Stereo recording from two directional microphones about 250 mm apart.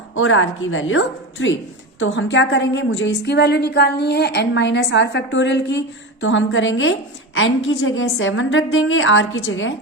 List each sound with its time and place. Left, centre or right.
0.2 s a woman's voice: left